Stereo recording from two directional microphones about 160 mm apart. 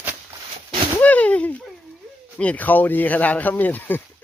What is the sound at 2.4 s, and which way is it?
Speech, 10° left (ahead or behind).